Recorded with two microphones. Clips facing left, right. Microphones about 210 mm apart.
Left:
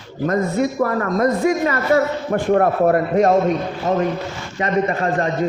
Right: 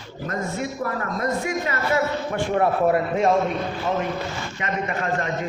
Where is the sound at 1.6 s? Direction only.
40° left (ahead or behind).